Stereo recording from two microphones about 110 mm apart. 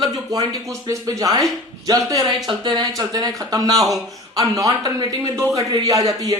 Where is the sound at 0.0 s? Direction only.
35° right (ahead or behind).